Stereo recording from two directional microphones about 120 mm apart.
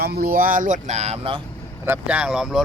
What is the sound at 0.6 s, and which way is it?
Speech, 85° right.